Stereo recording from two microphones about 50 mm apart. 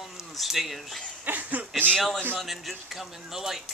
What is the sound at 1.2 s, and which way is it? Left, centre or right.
Speech, right.